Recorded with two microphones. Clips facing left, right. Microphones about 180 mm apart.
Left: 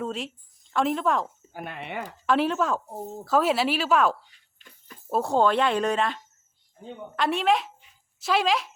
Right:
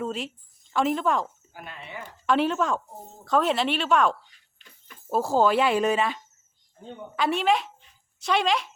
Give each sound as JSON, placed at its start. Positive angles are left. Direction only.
{"t": 0.0, "sound": "a woman's voice", "side_deg": 0}
{"t": 1.5, "sound": "speech", "side_deg": 60}
{"t": 2.2, "sound": "speech", "side_deg": 0}
{"t": 7.8, "sound": "a sound", "side_deg": 0}